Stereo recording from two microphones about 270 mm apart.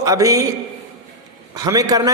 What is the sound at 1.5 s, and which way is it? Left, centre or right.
Speech, centre.